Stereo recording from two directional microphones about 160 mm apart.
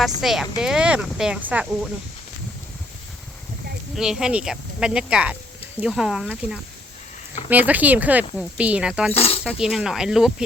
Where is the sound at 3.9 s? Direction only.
5° right (ahead or behind).